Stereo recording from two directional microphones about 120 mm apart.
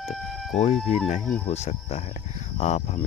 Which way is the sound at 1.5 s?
65° left (ahead or behind).